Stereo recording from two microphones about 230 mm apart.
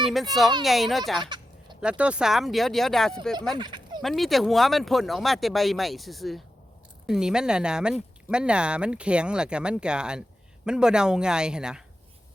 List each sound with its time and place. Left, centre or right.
0.0 s speech: centre
3.6 s a sound: centre
4.0 s speech: centre